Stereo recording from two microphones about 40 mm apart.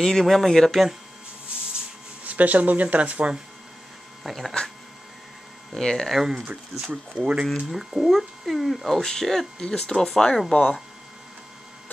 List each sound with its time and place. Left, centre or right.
0.0 s speech: centre
2.2 s speech: right
4.3 s speech: centre
5.8 s speech: centre
6.0 s speech: centre
6.3 s speech: right
7.7 s speech: centre
10.5 s speech: left